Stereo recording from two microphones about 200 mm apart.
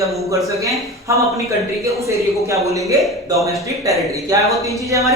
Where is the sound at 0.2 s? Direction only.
15° right (ahead or behind).